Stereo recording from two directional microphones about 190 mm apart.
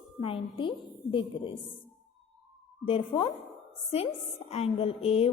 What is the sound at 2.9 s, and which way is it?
A woman's voice, 30° left (ahead or behind).